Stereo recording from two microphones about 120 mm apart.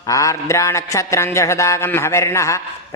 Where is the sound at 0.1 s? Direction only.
25° left (ahead or behind).